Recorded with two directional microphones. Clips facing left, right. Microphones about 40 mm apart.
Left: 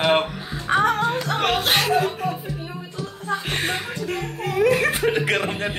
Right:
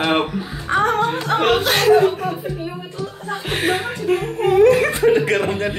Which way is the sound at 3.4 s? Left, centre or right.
Centre.